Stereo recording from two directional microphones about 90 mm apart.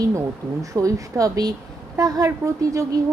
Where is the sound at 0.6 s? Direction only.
40° right (ahead or behind).